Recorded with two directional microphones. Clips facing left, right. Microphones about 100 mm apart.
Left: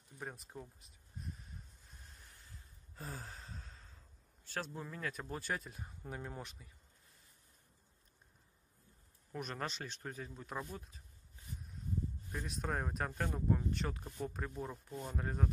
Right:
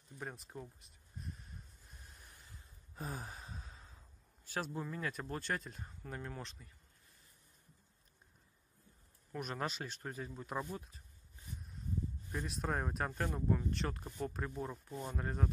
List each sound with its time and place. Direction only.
0.2 s a sound: centre (ahead or behind)
3.0 s gasp: 20° right (ahead or behind)
4.5 s speech: 10° right (ahead or behind); by 6.7 s 10° left (ahead or behind)
9.3 s speech: 5° right (ahead or behind)
12.3 s speech: centre (ahead or behind)